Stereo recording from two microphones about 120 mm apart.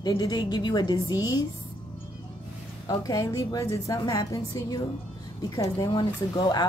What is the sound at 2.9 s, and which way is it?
A woman's voice, 30° left (ahead or behind).